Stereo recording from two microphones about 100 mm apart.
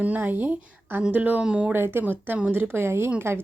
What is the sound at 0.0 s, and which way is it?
Speech, 20° right (ahead or behind).